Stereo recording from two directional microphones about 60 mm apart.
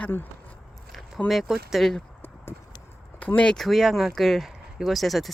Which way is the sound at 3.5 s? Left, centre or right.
Centre.